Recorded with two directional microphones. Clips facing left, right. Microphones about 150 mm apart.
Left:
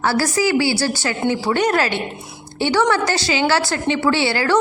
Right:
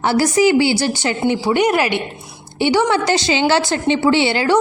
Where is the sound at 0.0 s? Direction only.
20° right (ahead or behind).